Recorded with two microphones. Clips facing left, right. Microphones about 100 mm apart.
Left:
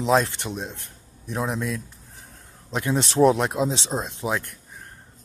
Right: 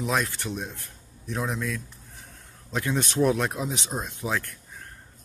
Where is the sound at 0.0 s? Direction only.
25° left (ahead or behind).